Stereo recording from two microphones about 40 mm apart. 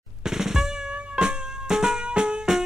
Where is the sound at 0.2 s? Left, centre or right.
Centre.